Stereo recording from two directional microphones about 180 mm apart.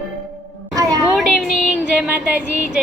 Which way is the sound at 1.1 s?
Centre (ahead or behind).